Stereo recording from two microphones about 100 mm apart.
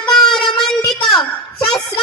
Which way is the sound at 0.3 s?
5° left (ahead or behind).